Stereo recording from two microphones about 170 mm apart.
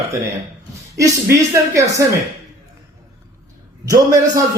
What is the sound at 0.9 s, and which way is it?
Speech, 15° right (ahead or behind).